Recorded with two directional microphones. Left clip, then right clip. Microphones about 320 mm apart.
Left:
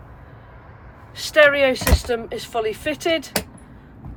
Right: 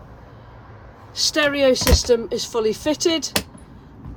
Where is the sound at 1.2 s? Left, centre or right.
Centre.